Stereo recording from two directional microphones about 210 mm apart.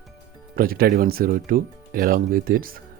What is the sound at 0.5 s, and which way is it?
Speech, 45° right (ahead or behind).